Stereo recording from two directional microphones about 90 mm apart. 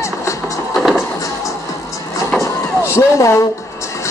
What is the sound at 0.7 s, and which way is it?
Music, centre (ahead or behind).